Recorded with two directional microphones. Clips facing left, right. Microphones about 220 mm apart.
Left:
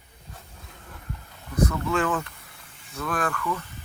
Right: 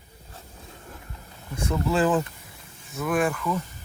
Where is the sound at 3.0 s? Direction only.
20° right (ahead or behind).